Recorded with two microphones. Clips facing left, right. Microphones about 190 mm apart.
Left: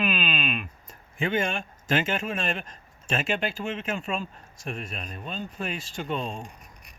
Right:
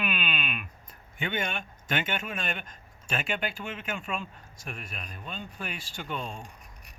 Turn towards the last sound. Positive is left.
turn(degrees=25)  # may be behind; listen again after turning